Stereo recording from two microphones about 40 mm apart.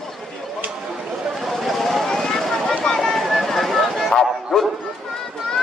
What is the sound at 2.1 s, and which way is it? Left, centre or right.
Vehicle, centre.